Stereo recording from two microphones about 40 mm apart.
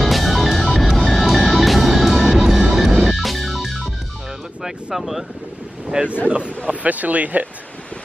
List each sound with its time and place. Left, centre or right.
0.0 s music: centre
3.2 s organ: centre
4.9 s speech: centre
6.2 s speech: right